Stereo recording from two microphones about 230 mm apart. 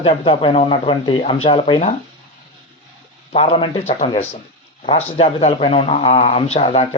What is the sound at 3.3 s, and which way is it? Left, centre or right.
A man's voice, left.